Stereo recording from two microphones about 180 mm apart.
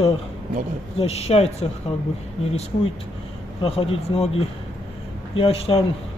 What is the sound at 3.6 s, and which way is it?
Speech, 30° left (ahead or behind).